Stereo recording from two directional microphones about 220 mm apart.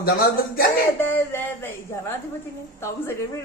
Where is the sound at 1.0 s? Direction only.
10° left (ahead or behind).